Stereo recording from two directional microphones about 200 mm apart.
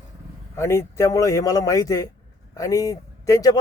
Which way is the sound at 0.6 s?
15° left (ahead or behind).